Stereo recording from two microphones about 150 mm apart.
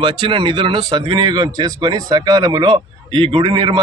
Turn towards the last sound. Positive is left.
turn(degrees=-30)  # may be behind; listen again after turning